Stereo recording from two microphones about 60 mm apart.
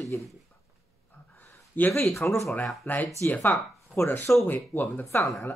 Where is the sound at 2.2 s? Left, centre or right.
Left.